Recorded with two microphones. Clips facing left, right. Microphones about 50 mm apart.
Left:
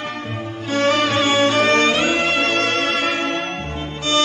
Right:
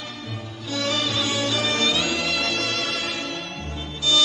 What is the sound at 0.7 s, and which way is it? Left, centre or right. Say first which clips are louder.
Music: left 8 dB; left.